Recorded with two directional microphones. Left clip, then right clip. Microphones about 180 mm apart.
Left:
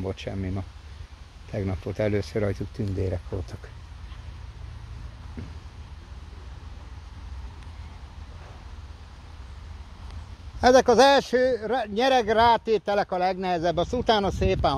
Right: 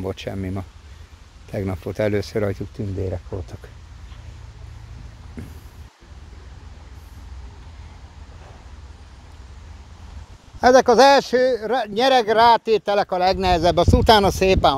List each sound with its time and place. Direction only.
0.0 s speech: 30° right (ahead or behind)
3.0 s speech: centre (ahead or behind)
5.4 s vehicle: 35° right (ahead or behind)
10.6 s speech: 15° right (ahead or behind)